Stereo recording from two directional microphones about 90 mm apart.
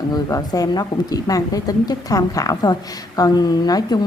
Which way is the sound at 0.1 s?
45° left (ahead or behind).